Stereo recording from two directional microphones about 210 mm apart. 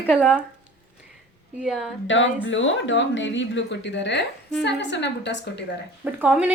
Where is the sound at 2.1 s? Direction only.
60° left (ahead or behind).